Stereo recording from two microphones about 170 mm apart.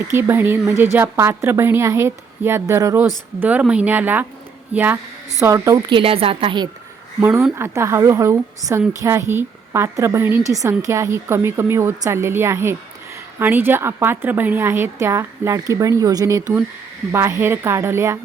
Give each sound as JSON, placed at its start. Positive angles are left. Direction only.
{"t": 0.1, "sound": "a woman's voice", "side_deg": -15}
{"t": 6.0, "sound": "a woman's voice", "side_deg": -35}
{"t": 7.2, "sound": "a woman's voice", "side_deg": -10}